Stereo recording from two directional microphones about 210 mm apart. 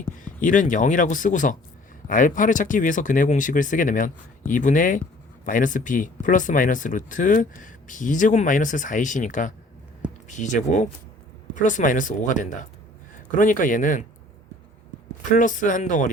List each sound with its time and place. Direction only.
0.3 s speech: 40° left (ahead or behind)
15.3 s speech: 40° left (ahead or behind)